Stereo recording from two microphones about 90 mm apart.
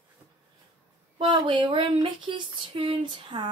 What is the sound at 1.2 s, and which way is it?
Speech, 65° right (ahead or behind).